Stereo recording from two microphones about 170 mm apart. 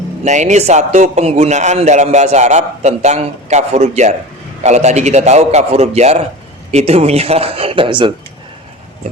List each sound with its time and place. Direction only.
0.3 s a man's voice: 45° right (ahead or behind); by 8.1 s 30° right (ahead or behind)